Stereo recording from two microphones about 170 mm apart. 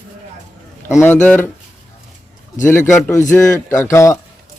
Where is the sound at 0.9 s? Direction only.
15° left (ahead or behind).